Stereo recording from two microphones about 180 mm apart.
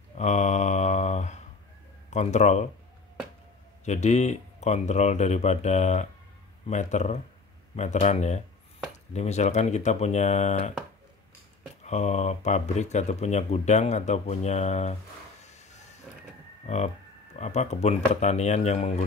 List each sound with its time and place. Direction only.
0.2 s mantra: 40° left (ahead or behind)
2.0 s speech: 40° left (ahead or behind)
3.8 s speech: 40° left (ahead or behind)
11.8 s speech: 40° left (ahead or behind)
16.6 s speech: 40° left (ahead or behind)